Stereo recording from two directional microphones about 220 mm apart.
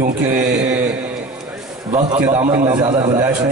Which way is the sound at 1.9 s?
15° right (ahead or behind).